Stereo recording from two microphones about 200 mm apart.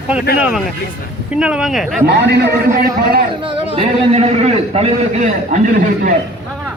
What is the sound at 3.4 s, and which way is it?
A man's voice, 25° right (ahead or behind).